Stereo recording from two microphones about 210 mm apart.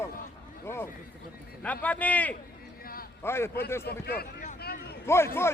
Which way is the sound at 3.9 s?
50° left (ahead or behind).